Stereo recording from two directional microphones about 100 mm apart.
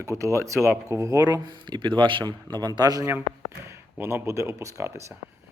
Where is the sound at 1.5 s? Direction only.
50° right (ahead or behind).